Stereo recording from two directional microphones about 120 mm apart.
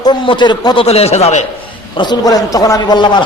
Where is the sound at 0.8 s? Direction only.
60° left (ahead or behind).